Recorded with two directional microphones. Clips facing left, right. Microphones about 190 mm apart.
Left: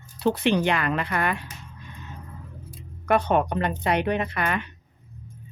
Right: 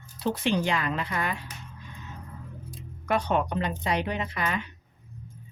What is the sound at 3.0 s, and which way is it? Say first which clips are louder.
Speech: left 4 dB; 55° left (ahead or behind).